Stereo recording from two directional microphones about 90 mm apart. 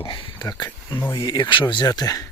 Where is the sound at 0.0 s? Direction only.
70° left (ahead or behind).